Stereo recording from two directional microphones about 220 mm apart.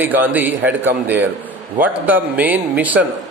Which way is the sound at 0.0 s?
10° right (ahead or behind).